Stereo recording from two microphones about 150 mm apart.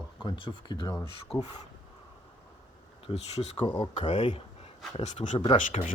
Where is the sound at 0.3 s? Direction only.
35° left (ahead or behind).